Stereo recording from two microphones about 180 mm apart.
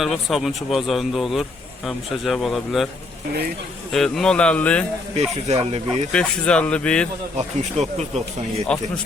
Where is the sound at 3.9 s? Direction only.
5° left (ahead or behind).